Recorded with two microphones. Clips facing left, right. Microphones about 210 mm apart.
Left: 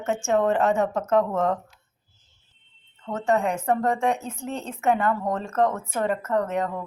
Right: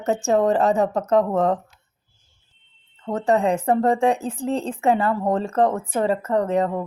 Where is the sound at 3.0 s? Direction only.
35° right (ahead or behind).